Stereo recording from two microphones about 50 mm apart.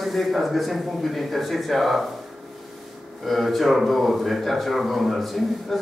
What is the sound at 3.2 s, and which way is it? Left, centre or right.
Speech, centre.